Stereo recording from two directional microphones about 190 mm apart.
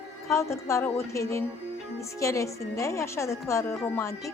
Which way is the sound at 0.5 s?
15° left (ahead or behind).